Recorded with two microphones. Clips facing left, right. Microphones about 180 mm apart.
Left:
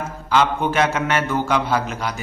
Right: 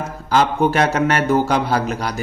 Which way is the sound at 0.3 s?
40° right (ahead or behind).